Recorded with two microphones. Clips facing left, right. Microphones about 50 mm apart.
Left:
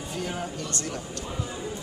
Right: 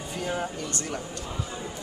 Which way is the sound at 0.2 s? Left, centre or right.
Centre.